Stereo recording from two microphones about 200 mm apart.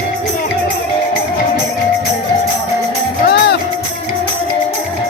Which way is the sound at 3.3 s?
55° left (ahead or behind).